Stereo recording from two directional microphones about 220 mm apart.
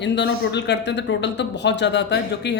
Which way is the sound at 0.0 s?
50° left (ahead or behind).